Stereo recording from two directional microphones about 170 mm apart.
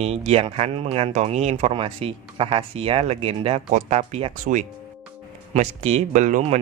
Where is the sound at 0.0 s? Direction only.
40° right (ahead or behind).